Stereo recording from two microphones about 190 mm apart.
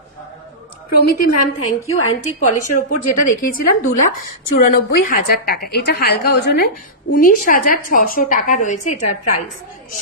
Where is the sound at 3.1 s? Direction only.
50° left (ahead or behind).